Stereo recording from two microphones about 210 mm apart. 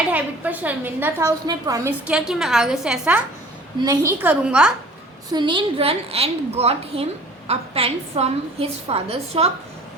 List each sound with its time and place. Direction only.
0.1 s a woman's voice: 5° right (ahead or behind)
3.8 s a woman's voice: 15° right (ahead or behind)
5.3 s a woman's voice: 20° right (ahead or behind)